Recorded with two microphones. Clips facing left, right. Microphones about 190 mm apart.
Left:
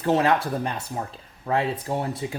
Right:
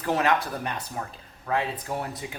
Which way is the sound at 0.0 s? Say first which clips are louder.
Left 4 dB; 30° left (ahead or behind).